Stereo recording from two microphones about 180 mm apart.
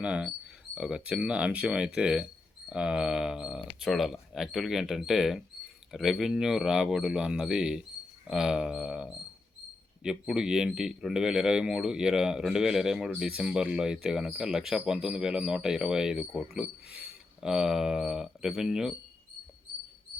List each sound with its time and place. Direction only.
0.0 s speech: 5° right (ahead or behind)